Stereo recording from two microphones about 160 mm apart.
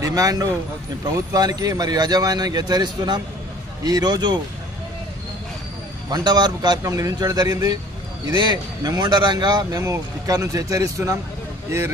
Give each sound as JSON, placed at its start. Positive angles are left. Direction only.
{"t": 0.0, "sound": "speech", "side_deg": -20}
{"t": 6.0, "sound": "speech", "side_deg": -25}